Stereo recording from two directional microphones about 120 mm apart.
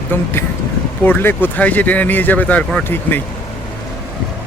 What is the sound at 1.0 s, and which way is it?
Speech, 15° left (ahead or behind).